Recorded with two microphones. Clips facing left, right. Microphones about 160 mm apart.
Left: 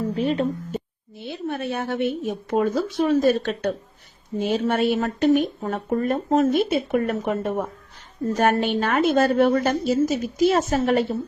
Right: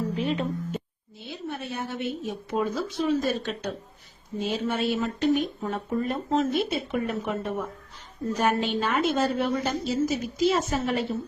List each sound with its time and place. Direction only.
0.2 s speech: 40° left (ahead or behind)
1.3 s a woman's voice: 60° left (ahead or behind)